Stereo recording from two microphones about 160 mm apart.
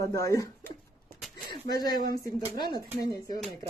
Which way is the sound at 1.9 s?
65° right (ahead or behind).